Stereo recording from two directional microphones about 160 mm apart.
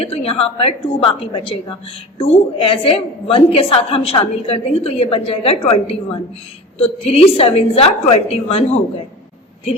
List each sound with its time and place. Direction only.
0.0 s a woman's voice: 40° left (ahead or behind)